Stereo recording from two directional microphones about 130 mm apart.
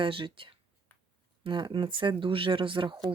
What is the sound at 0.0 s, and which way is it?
Speech, 40° right (ahead or behind).